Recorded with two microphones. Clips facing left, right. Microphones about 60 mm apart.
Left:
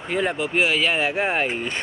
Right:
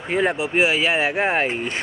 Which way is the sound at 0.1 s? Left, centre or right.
Right.